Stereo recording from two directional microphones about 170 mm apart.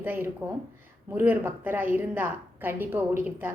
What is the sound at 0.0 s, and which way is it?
A woman's voice, 10° right (ahead or behind).